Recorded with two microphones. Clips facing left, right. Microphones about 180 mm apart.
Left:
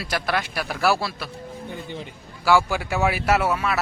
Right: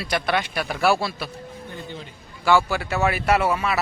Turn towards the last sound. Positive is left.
turn(degrees=0)  # may be behind; listen again after turning